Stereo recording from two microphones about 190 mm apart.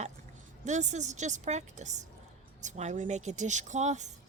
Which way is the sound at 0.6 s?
40° right (ahead or behind).